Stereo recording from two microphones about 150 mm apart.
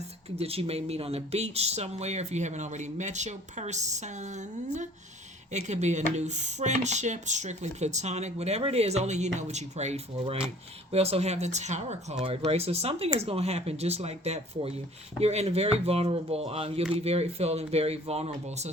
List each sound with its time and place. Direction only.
0.3 s speech: 40° right (ahead or behind)